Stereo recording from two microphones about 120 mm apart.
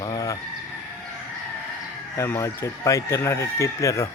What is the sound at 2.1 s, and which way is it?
Speech, 25° left (ahead or behind).